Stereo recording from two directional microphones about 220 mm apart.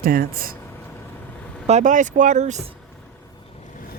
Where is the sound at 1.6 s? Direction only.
35° right (ahead or behind).